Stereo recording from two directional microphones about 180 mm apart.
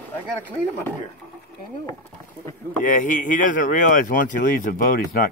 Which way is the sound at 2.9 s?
45° left (ahead or behind).